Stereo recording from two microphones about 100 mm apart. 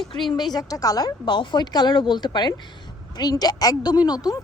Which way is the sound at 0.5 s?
40° left (ahead or behind).